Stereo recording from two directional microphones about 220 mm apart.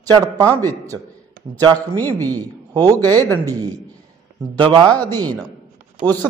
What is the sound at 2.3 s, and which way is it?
A man's voice, 15° right (ahead or behind).